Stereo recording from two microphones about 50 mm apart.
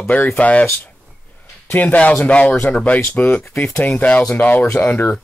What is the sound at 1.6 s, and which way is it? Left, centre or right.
Speech, left.